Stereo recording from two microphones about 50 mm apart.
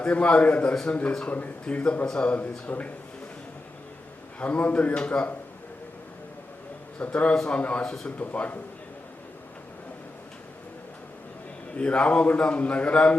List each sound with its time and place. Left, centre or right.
0.0 s a man's voice: left
0.7 s a man's voice: centre
4.4 s a man's voice: left
7.0 s a man's voice: left
11.7 s a man's voice: left